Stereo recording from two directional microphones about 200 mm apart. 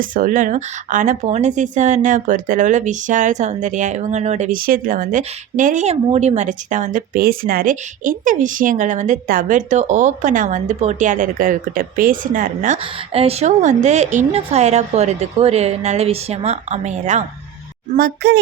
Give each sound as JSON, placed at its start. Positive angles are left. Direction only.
{"t": 0.0, "sound": "speech", "side_deg": -40}
{"t": 17.9, "sound": "speech", "side_deg": -50}